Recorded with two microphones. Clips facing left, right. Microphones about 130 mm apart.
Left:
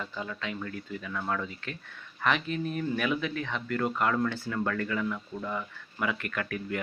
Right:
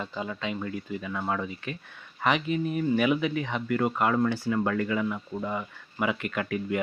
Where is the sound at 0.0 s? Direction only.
20° right (ahead or behind).